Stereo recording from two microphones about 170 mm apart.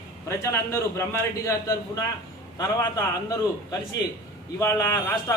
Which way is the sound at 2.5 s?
20° left (ahead or behind).